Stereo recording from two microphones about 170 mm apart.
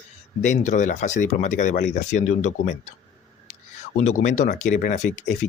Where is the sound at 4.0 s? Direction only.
40° left (ahead or behind).